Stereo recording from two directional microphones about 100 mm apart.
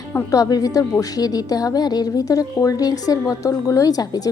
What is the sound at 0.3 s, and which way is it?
A woman's voice, 35° left (ahead or behind).